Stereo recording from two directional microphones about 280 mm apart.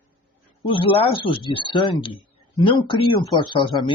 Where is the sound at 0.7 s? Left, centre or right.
Centre.